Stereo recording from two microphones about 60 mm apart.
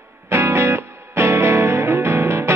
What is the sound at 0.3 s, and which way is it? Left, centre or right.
Music, right.